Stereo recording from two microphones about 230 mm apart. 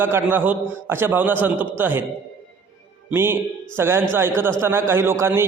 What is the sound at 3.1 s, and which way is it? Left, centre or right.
A man's voice, centre.